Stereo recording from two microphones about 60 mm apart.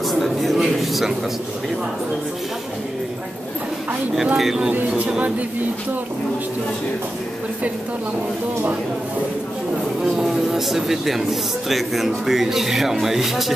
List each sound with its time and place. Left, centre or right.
0.2 s a sound: centre
4.4 s speech: centre
4.6 s speech: centre
10.0 s speech: centre